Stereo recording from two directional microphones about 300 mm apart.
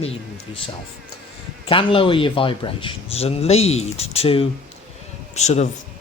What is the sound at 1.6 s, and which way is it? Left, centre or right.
Speech, centre.